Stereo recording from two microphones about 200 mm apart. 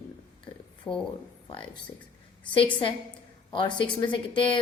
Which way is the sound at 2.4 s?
25° left (ahead or behind).